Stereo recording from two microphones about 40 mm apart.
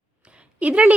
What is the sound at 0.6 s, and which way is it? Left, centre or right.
Speech, right.